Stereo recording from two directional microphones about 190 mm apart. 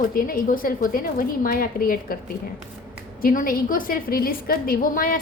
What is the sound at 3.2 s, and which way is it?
A woman's voice, 50° left (ahead or behind).